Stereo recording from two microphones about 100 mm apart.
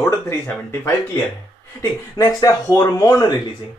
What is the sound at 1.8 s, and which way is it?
Speech, 40° left (ahead or behind).